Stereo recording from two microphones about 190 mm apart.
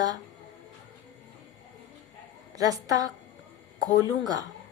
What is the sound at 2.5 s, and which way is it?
Speech, 20° right (ahead or behind).